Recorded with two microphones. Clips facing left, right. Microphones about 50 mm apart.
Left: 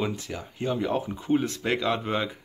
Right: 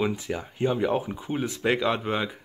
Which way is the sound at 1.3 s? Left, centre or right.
Centre.